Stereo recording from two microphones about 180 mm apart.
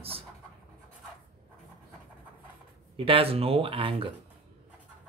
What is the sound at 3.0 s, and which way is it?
Speech, 30° right (ahead or behind).